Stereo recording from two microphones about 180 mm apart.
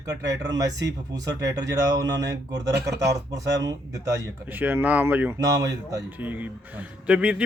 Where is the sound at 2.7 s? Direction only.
70° right (ahead or behind).